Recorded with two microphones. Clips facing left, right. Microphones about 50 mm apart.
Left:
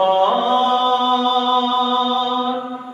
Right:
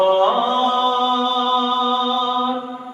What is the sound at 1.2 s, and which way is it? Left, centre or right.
Music, centre.